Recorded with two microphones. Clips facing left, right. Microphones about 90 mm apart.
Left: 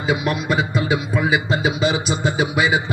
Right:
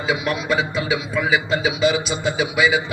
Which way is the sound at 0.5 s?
45° left (ahead or behind).